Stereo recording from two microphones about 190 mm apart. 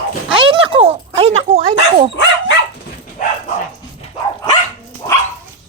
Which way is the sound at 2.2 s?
70° left (ahead or behind).